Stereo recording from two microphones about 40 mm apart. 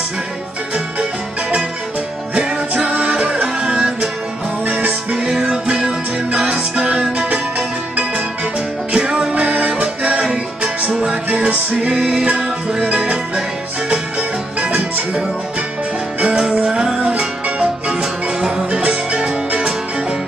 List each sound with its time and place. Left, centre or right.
2.3 s music: right
3.6 s music: centre
4.6 s music: right
5.1 s music: centre
8.9 s music: right
9.3 s music: right
11.2 s music: right
12.0 s music: centre
12.8 s music: right
14.6 s music: right
16.4 s music: right
18.4 s music: centre
18.8 s music: right